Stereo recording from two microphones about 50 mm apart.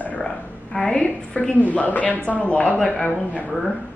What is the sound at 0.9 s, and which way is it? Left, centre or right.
Speech, left.